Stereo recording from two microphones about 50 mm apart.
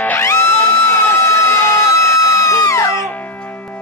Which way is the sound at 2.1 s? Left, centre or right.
Left.